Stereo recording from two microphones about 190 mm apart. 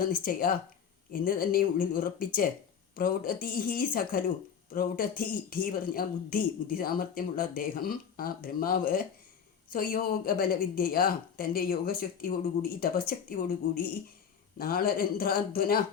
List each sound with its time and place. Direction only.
0.0 s speech: 50° left (ahead or behind)